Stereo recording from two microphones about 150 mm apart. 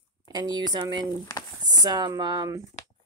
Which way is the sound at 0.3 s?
30° right (ahead or behind).